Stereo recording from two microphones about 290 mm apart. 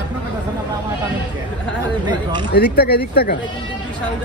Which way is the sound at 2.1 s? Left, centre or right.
Centre.